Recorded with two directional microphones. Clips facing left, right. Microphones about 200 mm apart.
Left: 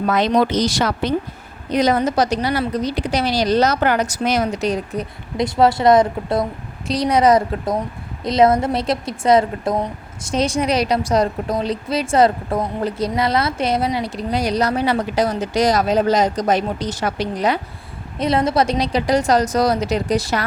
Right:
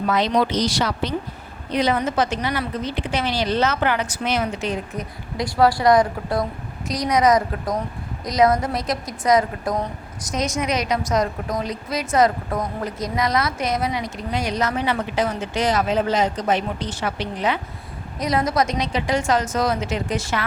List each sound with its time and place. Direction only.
0.1 s a woman's voice: 50° left (ahead or behind)
5.4 s a woman's voice: 25° left (ahead or behind); by 17.6 s 40° left (ahead or behind)
18.2 s a woman's voice: 25° left (ahead or behind)